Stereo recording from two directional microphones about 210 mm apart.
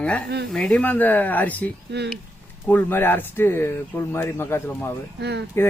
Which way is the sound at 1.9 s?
50° right (ahead or behind).